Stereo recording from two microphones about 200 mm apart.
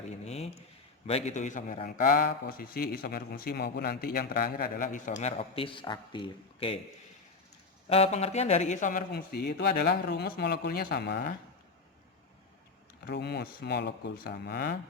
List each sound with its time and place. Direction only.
0.3 s a man's voice: 30° left (ahead or behind)
7.9 s speech: 30° left (ahead or behind); by 11.3 s 55° left (ahead or behind)
13.1 s speech: 55° left (ahead or behind)